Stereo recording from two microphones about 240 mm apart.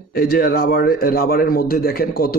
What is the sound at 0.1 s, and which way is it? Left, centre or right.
A man's voice, left.